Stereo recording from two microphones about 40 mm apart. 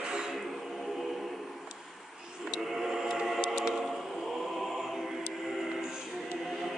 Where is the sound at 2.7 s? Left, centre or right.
Centre.